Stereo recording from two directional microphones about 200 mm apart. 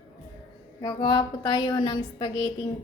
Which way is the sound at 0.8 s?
20° left (ahead or behind).